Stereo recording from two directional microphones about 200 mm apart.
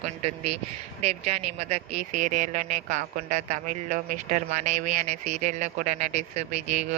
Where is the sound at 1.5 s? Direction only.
35° right (ahead or behind).